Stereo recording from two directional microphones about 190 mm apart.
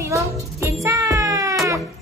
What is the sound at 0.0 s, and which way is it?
Music, 15° right (ahead or behind).